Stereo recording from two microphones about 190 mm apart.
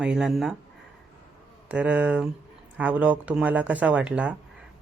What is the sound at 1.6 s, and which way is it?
Speech, 5° right (ahead or behind).